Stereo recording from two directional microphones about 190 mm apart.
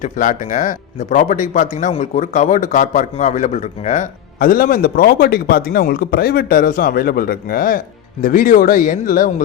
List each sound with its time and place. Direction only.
0.0 s speech: 40° left (ahead or behind)